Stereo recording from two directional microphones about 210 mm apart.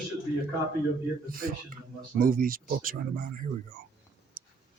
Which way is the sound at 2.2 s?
40° right (ahead or behind).